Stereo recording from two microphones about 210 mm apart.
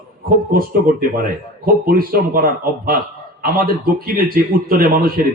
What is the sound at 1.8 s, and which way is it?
A man's voice, 45° right (ahead or behind).